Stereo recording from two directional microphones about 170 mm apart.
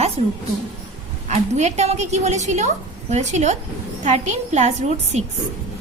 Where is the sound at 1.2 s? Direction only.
45° right (ahead or behind).